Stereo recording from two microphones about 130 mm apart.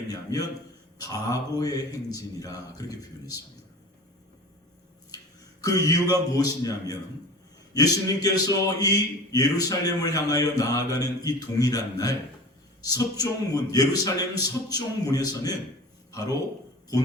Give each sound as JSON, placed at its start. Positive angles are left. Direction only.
{"t": 0.1, "sound": "a man's voice", "side_deg": 30}
{"t": 5.6, "sound": "a man's voice", "side_deg": 25}